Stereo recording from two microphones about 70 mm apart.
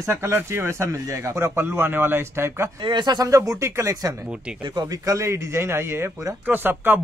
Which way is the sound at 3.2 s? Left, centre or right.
Right.